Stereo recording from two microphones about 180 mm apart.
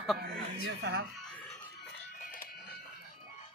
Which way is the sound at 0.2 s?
65° right (ahead or behind).